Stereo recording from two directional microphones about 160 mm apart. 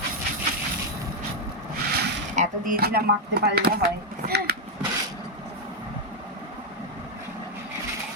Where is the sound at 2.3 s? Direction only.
50° right (ahead or behind).